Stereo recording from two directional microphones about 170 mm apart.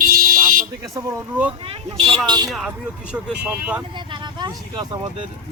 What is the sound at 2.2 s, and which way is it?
Speech, 25° right (ahead or behind).